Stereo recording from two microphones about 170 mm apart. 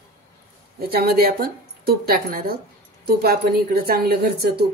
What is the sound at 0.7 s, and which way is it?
A woman's voice, 65° right (ahead or behind).